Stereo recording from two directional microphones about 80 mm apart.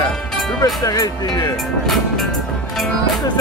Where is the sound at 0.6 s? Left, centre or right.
Left.